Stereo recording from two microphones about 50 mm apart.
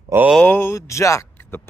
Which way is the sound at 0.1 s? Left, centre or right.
Right.